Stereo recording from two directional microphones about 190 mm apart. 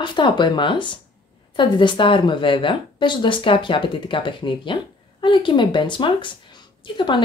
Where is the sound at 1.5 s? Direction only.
25° left (ahead or behind).